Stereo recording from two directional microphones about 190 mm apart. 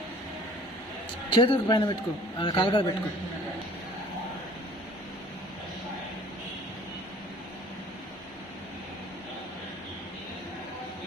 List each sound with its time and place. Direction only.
1.3 s a man's voice: 25° left (ahead or behind)